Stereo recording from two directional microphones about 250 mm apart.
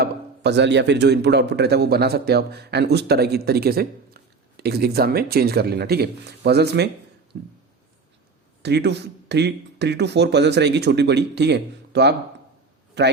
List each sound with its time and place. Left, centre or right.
0.0 s a man's voice: right
8.6 s speech: right